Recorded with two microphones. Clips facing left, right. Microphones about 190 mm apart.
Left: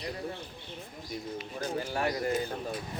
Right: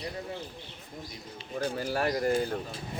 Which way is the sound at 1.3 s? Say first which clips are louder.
Right 3 dB; 30° right (ahead or behind).